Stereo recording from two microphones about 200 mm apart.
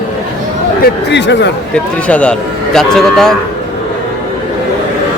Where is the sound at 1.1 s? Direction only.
60° left (ahead or behind).